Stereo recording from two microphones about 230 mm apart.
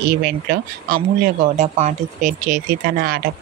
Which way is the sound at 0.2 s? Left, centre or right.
Right.